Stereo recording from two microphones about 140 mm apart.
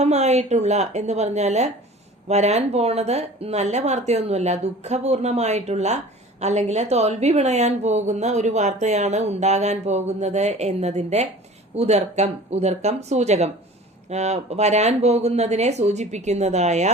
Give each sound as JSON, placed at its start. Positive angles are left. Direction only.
{"t": 0.0, "sound": "a woman's voice", "side_deg": -55}